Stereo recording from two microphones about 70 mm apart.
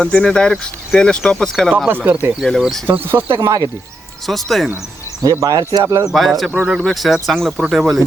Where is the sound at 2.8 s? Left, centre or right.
Right.